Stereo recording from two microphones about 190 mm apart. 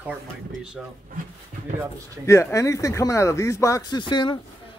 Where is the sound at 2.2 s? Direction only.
15° left (ahead or behind).